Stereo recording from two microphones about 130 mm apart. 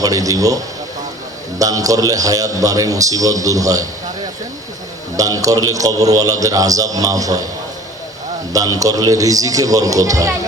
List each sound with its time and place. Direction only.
0.0 s a man's voice: 25° right (ahead or behind)
5.1 s a man's voice: 25° right (ahead or behind)
8.5 s a man's voice: 25° right (ahead or behind)